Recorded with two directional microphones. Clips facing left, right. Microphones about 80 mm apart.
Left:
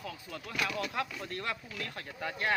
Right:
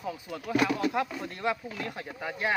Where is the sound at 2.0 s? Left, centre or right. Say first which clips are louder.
Right 1 dB; centre.